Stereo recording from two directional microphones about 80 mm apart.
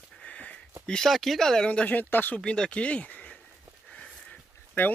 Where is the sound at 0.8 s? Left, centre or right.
Centre; by 2.4 s left.